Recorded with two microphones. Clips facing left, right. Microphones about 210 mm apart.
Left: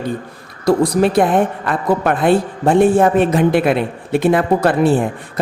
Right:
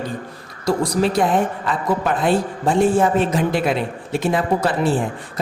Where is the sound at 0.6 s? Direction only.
55° left (ahead or behind).